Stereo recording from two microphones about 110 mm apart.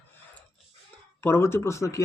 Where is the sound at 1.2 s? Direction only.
20° left (ahead or behind).